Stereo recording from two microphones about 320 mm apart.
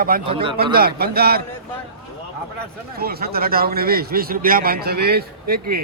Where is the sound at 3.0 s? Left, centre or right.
Right.